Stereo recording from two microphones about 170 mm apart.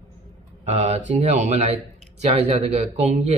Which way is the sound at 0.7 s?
40° right (ahead or behind).